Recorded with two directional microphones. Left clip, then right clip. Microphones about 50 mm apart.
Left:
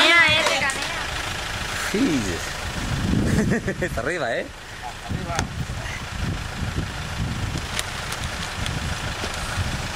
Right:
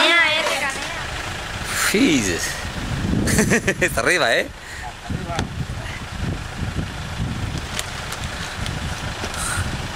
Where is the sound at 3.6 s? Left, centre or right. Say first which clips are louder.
Right 7 dB; left.